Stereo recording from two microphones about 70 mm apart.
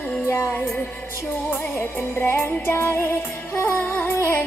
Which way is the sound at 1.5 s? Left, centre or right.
Left.